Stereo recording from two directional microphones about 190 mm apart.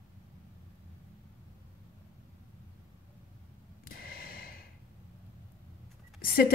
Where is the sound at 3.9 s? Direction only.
50° left (ahead or behind).